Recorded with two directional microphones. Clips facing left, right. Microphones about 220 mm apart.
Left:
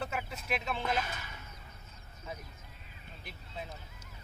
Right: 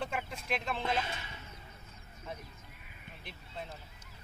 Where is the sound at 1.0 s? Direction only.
25° right (ahead or behind).